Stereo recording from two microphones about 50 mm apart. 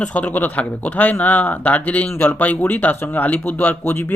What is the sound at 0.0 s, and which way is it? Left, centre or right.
Speech, left.